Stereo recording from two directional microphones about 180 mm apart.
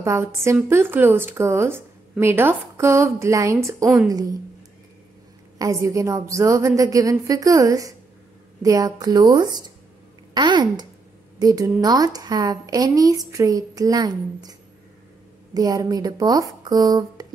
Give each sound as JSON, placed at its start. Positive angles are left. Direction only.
{"t": 0.0, "sound": "a woman's voice", "side_deg": -15}
{"t": 5.6, "sound": "a woman's voice", "side_deg": -20}
{"t": 15.5, "sound": "a woman's voice", "side_deg": -20}